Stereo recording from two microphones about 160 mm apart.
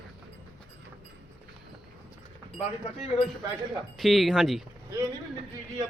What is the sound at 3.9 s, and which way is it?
Speech, centre (ahead or behind).